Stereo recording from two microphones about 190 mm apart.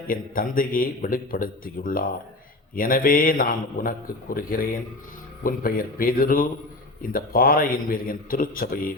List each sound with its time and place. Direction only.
0.1 s a man's voice: 45° left (ahead or behind)